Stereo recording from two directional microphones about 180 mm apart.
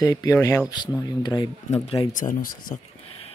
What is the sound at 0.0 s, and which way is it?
Speech, 20° left (ahead or behind).